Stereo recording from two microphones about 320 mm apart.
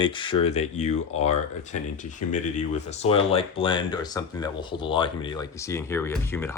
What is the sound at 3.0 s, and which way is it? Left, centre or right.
Speech, centre.